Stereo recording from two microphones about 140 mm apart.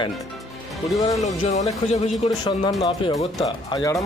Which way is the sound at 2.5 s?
35° left (ahead or behind).